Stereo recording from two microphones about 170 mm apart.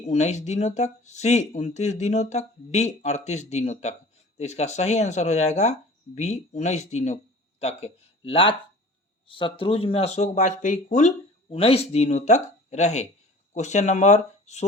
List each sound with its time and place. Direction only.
0.1 s speech: 40° left (ahead or behind)